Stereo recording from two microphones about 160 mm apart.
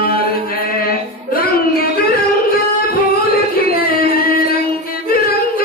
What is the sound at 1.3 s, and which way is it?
Music, 65° left (ahead or behind).